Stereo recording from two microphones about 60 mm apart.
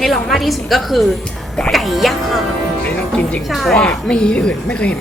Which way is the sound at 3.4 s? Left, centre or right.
Centre.